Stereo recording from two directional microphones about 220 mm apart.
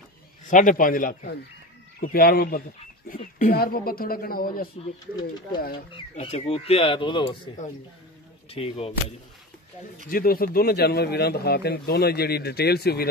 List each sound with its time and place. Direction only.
0.5 s speech: 35° left (ahead or behind)
5.9 s speech: 30° left (ahead or behind)
8.5 s speech: 25° left (ahead or behind)
10.0 s speech: 40° left (ahead or behind)